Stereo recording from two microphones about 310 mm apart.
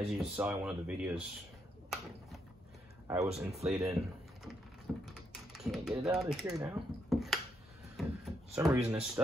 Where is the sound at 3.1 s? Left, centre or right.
Centre.